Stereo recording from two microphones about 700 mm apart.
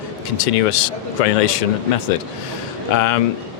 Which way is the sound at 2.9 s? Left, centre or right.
Left.